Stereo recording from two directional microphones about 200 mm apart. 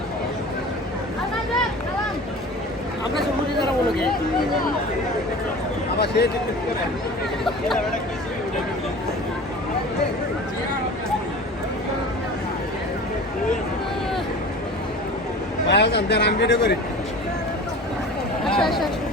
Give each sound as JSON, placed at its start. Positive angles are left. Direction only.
{"t": 6.0, "sound": "a man's voice", "side_deg": 55}
{"t": 15.6, "sound": "a man's voice", "side_deg": 60}
{"t": 18.4, "sound": "speech", "side_deg": 0}